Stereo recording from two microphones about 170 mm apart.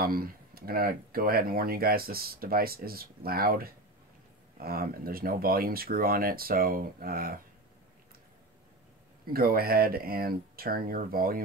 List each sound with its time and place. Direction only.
0.0 s speech: 60° right (ahead or behind)
9.2 s speech: 60° right (ahead or behind)